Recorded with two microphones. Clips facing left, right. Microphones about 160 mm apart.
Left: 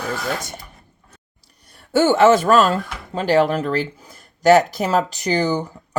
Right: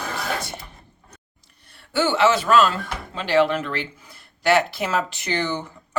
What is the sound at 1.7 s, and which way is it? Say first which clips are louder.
Speech: left 6 dB; 45° left (ahead or behind).